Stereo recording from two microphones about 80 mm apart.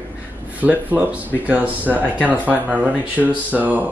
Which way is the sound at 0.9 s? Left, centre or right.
Centre.